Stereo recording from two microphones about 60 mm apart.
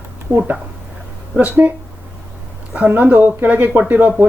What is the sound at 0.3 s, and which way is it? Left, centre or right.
Speech, right.